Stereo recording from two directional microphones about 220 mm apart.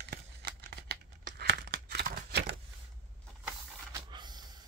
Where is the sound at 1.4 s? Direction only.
45° right (ahead or behind).